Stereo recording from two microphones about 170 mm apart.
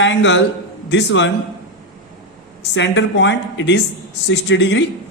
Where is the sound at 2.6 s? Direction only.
90° left.